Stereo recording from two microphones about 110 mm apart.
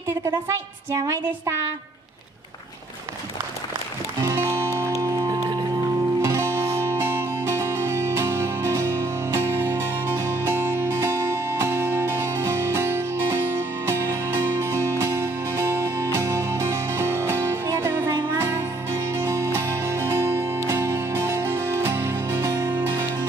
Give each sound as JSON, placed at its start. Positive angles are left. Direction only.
{"t": 0.5, "sound": "a woman's voice", "side_deg": -25}
{"t": 4.2, "sound": "music", "side_deg": -25}
{"t": 6.2, "sound": "music", "side_deg": -25}